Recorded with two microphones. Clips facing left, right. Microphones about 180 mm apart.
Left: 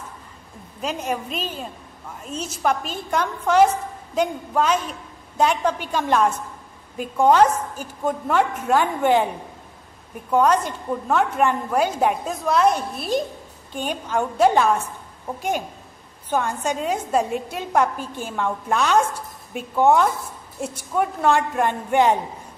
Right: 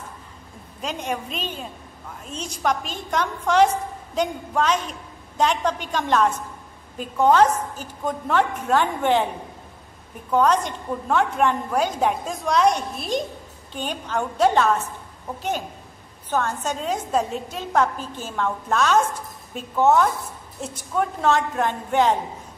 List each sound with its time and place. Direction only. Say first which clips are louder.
0.7 s a woman's voice: left 2 dB; 5° left (ahead or behind)
10.3 s a woman's voice: left 1 dB; 10° left (ahead or behind)
16.3 s a woman's voice: left 1 dB; 10° left (ahead or behind)